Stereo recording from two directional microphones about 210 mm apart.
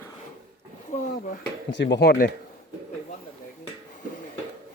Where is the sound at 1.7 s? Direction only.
55° left (ahead or behind).